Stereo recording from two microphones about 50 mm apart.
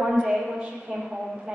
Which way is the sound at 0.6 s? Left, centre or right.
Right.